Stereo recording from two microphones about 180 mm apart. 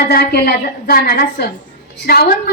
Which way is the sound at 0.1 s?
60° left (ahead or behind).